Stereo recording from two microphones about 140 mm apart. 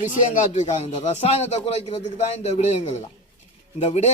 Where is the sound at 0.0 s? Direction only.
60° left (ahead or behind).